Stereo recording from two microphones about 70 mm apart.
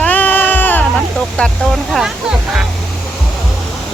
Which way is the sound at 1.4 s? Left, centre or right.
Centre.